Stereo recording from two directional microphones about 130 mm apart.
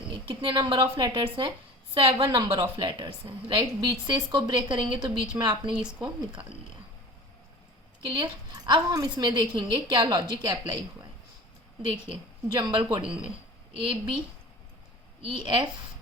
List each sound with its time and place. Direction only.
0.3 s a woman's voice: 35° right (ahead or behind)
5.7 s speech: 5° right (ahead or behind)
8.0 s a woman's voice: 40° right (ahead or behind)
12.0 s a woman's voice: 35° right (ahead or behind)
15.3 s a woman's voice: 35° right (ahead or behind)